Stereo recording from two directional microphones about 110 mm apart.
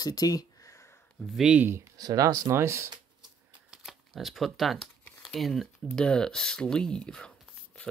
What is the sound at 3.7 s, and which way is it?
Speech, centre (ahead or behind).